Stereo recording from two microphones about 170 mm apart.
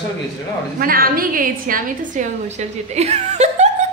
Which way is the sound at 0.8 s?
60° right (ahead or behind).